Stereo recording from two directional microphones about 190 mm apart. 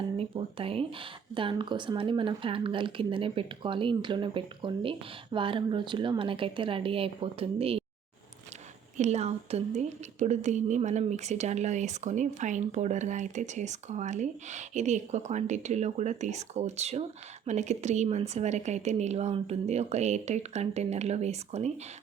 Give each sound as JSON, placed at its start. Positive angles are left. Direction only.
{"t": 0.2, "sound": "speech", "side_deg": -30}
{"t": 9.0, "sound": "a woman's voice", "side_deg": -35}